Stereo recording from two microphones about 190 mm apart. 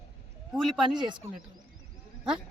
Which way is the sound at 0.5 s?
Centre (ahead or behind).